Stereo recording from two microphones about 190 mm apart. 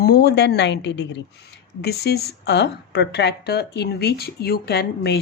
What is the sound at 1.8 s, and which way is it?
A woman's voice, 55° left (ahead or behind).